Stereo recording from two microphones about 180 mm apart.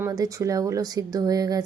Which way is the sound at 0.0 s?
20° right (ahead or behind).